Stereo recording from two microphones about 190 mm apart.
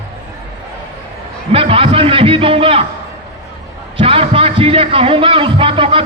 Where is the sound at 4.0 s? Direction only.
30° right (ahead or behind).